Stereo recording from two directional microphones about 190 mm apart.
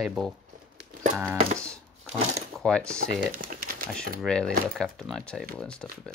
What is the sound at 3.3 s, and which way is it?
Speech, 50° right (ahead or behind).